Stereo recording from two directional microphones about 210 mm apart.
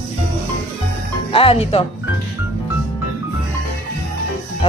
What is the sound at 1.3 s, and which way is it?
Speech, 25° left (ahead or behind).